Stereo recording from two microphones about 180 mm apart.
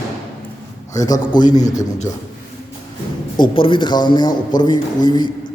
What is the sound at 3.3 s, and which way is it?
A man's voice, 25° left (ahead or behind).